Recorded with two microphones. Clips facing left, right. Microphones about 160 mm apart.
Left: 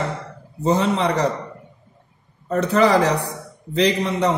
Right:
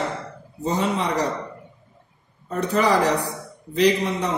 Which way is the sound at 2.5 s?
90° left.